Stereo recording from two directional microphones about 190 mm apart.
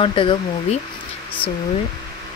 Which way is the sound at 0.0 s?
25° left (ahead or behind).